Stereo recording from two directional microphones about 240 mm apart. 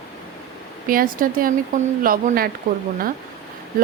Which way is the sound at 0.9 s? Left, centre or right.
Right.